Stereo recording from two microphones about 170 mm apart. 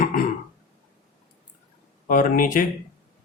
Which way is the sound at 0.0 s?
55° left (ahead or behind).